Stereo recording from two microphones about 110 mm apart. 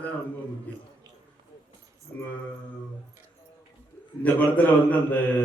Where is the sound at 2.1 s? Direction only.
20° left (ahead or behind).